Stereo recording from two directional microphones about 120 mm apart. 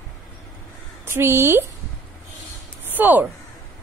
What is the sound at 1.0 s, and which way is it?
Speech, 20° right (ahead or behind).